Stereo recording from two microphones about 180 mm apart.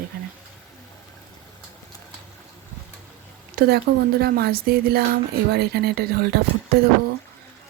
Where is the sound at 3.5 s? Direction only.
55° right (ahead or behind).